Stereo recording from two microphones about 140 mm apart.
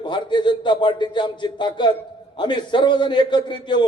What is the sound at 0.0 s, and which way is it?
A man's voice, 35° left (ahead or behind).